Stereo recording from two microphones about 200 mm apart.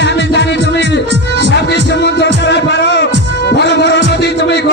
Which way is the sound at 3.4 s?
60° left (ahead or behind).